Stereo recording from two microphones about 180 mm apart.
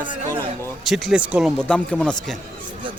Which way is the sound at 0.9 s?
5° right (ahead or behind).